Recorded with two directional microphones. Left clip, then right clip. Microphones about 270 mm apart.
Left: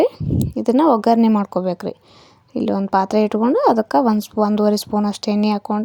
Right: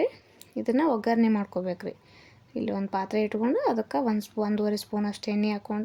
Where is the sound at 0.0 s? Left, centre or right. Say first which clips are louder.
Left 11 dB; left.